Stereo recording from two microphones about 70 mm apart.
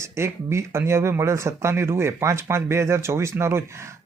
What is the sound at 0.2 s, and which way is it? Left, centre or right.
Speech, right.